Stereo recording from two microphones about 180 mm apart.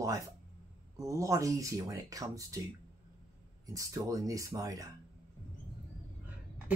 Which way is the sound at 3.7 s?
20° right (ahead or behind).